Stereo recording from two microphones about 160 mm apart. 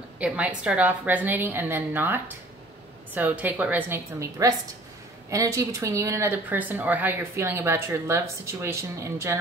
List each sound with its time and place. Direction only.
0.2 s speech: 5° right (ahead or behind)